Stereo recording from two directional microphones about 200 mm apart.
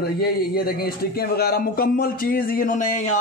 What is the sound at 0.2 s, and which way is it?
A man's voice, 50° left (ahead or behind).